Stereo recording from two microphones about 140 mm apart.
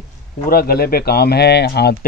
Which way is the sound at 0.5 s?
90° left.